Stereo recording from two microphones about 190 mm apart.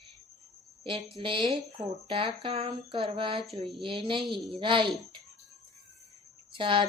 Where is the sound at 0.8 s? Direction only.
30° right (ahead or behind).